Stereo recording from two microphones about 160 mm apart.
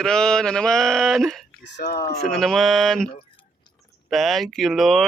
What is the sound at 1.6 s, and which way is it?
Speech, 90° left.